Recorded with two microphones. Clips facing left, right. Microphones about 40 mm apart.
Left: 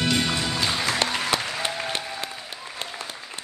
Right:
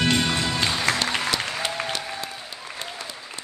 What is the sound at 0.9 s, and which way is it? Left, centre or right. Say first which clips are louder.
Applause: right 1 dB; right.